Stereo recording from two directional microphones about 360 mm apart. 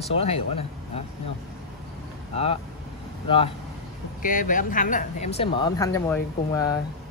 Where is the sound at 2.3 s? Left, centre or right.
Centre.